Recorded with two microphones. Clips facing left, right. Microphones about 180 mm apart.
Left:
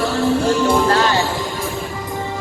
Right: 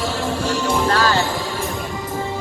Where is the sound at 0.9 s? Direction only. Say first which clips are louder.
Left 2 dB; 25° left (ahead or behind).